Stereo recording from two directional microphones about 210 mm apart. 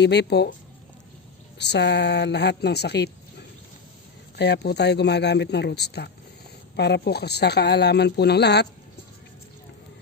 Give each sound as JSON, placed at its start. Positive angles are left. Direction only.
{"t": 0.0, "sound": "speech", "side_deg": 55}
{"t": 1.6, "sound": "speech", "side_deg": 55}